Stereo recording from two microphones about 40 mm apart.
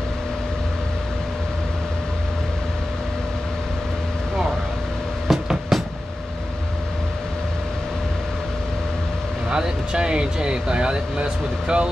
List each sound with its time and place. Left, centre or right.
5.3 s vehicle: centre
9.5 s speech: right